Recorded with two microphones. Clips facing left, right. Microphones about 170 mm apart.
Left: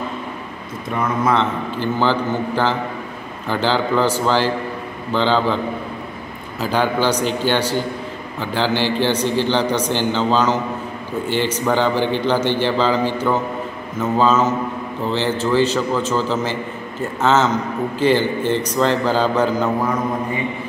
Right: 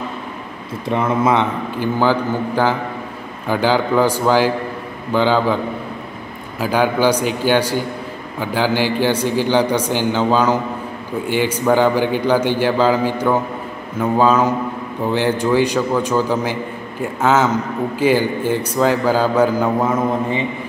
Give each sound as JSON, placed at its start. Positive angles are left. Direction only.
{"t": 0.8, "sound": "a man's voice", "side_deg": -25}
{"t": 6.6, "sound": "a man's voice", "side_deg": -10}
{"t": 19.8, "sound": "a man's voice", "side_deg": -25}